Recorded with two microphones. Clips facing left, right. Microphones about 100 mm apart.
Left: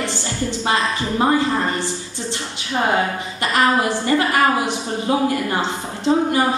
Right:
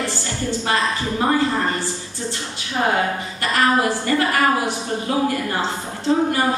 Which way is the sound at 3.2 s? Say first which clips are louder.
Left 2 dB; 20° left (ahead or behind).